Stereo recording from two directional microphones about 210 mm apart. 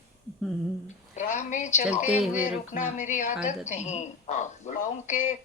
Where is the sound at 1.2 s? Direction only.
35° left (ahead or behind).